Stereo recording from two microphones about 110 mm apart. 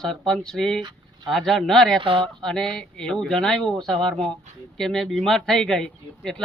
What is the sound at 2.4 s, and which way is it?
A man's voice, 5° left (ahead or behind).